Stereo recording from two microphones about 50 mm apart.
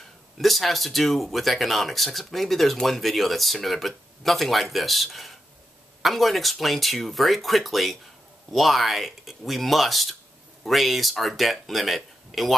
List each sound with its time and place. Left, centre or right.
0.4 s speech: centre